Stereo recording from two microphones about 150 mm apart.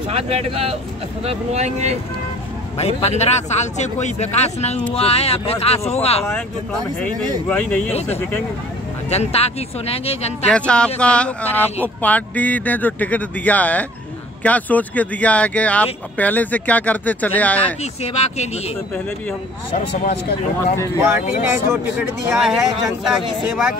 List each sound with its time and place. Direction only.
0.1 s speech: 40° right (ahead or behind)
2.8 s a man's voice: 45° left (ahead or behind)
6.3 s speech: 10° left (ahead or behind)
9.1 s a man's voice: 45° left (ahead or behind)
10.4 s speech: 5° left (ahead or behind)
18.0 s a man's voice: 45° left (ahead or behind)
21.0 s speech: 15° right (ahead or behind)
22.3 s speech: 5° right (ahead or behind)